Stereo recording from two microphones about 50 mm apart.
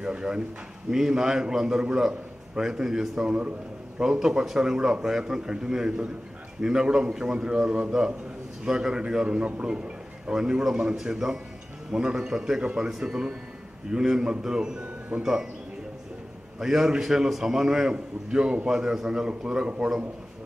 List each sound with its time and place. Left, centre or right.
0.0 s a man's voice: centre
16.5 s a man's voice: centre